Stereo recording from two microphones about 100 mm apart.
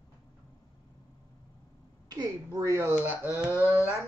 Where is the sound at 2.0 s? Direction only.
40° right (ahead or behind).